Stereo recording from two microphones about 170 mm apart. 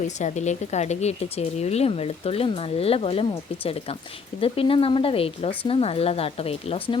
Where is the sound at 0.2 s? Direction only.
45° left (ahead or behind).